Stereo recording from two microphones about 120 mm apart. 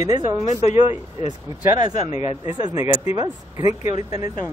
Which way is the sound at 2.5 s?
30° right (ahead or behind).